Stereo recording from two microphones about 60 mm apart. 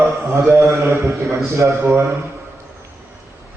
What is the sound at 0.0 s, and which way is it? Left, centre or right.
Mantra, right.